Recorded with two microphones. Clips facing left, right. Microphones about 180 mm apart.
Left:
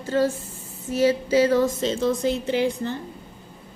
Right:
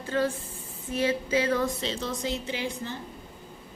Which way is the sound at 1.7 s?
45° left (ahead or behind).